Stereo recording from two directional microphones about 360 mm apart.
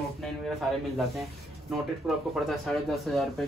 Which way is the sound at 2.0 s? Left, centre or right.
Centre.